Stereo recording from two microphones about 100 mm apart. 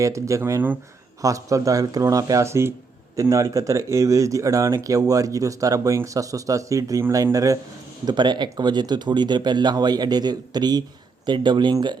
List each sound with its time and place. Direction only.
0.0 s speech: 30° right (ahead or behind)
8.0 s speech: 50° right (ahead or behind)